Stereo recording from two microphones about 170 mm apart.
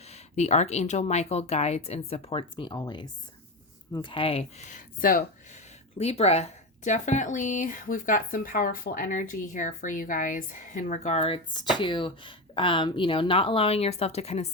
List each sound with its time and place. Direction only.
0.0 s speech: 40° left (ahead or behind); by 5.2 s 55° left (ahead or behind)
6.0 s speech: 35° left (ahead or behind)